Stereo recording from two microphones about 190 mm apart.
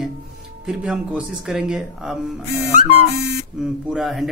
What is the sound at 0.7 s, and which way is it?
Speech, 5° right (ahead or behind).